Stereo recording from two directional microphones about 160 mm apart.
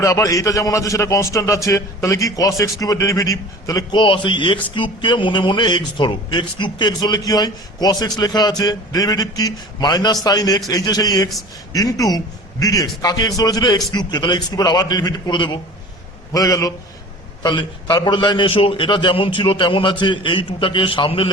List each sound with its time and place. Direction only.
0.0 s a man's voice: 20° left (ahead or behind)